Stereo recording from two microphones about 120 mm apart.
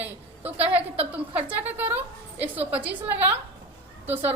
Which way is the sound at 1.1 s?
15° right (ahead or behind).